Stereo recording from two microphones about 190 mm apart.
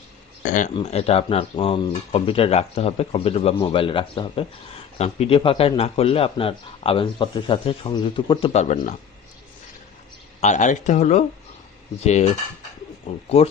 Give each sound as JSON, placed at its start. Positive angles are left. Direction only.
{"t": 0.4, "sound": "speech", "side_deg": 40}
{"t": 10.4, "sound": "speech", "side_deg": 40}
{"t": 13.1, "sound": "speech", "side_deg": 30}